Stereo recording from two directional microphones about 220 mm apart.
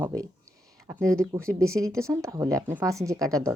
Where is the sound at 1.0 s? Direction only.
5° left (ahead or behind).